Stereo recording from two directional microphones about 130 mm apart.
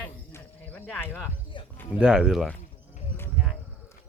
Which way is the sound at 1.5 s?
40° left (ahead or behind).